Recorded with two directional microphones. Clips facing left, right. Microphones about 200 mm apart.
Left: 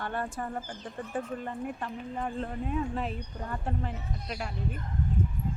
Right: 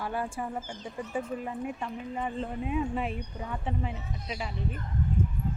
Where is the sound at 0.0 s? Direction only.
5° right (ahead or behind).